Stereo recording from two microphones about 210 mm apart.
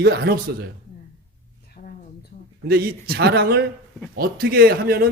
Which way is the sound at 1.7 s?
45° left (ahead or behind).